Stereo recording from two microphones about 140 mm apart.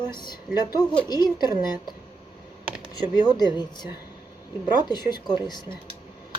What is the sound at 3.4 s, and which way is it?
A woman's voice, 30° left (ahead or behind).